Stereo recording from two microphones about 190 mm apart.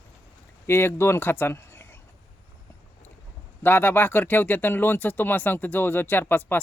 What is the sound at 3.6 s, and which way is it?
Speech, 10° left (ahead or behind).